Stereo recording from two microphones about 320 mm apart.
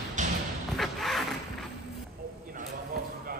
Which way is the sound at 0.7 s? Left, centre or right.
Centre.